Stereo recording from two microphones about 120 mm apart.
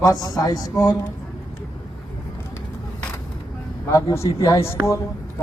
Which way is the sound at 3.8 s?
25° left (ahead or behind).